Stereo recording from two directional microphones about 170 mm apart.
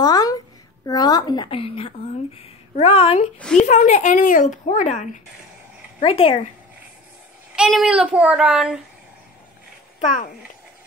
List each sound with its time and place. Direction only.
0.0 s a sound: 20° left (ahead or behind)
0.8 s a woman's voice: 20° left (ahead or behind)
3.3 s speech: 5° left (ahead or behind)
3.6 s a woman's voice: 45° left (ahead or behind)
6.0 s speech: 30° left (ahead or behind)
7.5 s speech: 5° right (ahead or behind)
9.9 s a child's voice: 45° left (ahead or behind)